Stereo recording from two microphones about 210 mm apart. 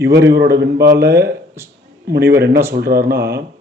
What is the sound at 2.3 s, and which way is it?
Speech, 50° right (ahead or behind).